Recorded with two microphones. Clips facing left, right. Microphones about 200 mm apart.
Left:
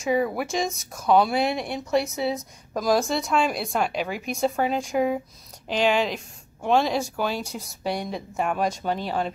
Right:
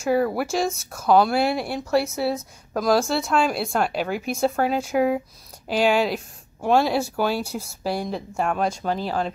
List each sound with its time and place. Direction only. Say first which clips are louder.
0.0 s speech: right 2 dB; centre (ahead or behind)